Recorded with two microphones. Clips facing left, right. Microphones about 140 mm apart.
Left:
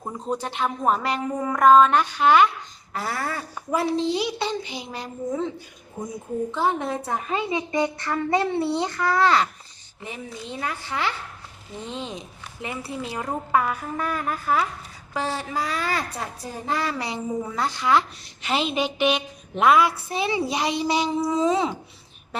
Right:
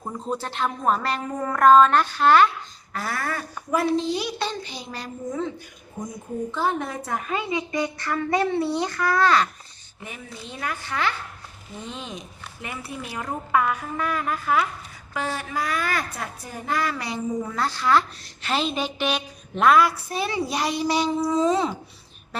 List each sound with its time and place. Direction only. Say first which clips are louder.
0.0 s a woman's voice: left 1 dB; 15° left (ahead or behind)
2.9 s a woman's voice: even; 25° left (ahead or behind)
6.0 s speech: left 1 dB; 5° left (ahead or behind)
6.5 s a woman's voice: left 1 dB; 20° left (ahead or behind)